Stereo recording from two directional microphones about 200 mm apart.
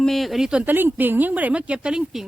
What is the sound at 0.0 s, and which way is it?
Speech, centre (ahead or behind).